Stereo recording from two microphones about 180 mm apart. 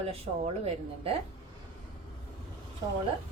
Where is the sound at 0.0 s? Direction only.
35° right (ahead or behind).